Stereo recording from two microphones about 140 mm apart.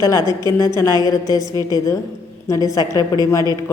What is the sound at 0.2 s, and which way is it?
Speech, 30° right (ahead or behind).